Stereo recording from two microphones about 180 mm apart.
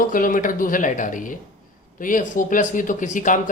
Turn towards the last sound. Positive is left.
turn(degrees=45)  # may be behind; listen again after turning